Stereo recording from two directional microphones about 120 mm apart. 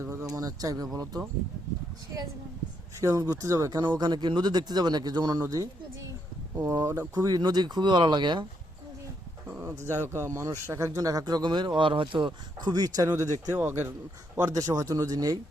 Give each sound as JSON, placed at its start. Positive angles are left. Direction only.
{"t": 0.0, "sound": "speech", "side_deg": -25}
{"t": 3.0, "sound": "speech", "side_deg": -30}
{"t": 9.5, "sound": "speech", "side_deg": -20}